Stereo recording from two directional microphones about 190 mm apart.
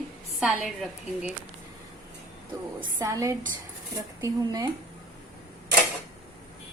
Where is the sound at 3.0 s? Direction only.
15° right (ahead or behind).